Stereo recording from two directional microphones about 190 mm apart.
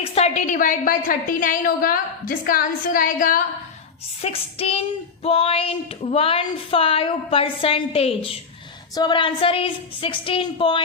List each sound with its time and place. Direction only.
0.0 s a woman's voice: 30° left (ahead or behind); by 3.4 s 45° left (ahead or behind)
4.2 s child singing: 30° left (ahead or behind)
9.0 s a woman's voice: 25° left (ahead or behind)